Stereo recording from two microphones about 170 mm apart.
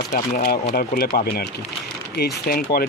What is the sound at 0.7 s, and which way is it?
Speech, 65° left (ahead or behind).